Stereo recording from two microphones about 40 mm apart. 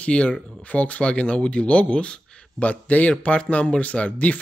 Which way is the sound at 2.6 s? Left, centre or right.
Left.